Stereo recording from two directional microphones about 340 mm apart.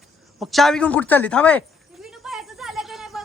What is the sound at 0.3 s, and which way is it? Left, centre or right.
A man's voice, centre.